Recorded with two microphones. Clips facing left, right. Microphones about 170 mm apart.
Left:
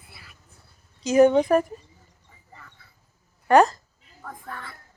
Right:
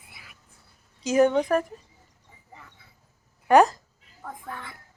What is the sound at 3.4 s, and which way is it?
A child's voice, 10° right (ahead or behind).